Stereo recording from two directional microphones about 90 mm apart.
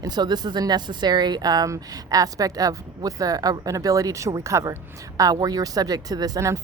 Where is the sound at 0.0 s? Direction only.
50° right (ahead or behind).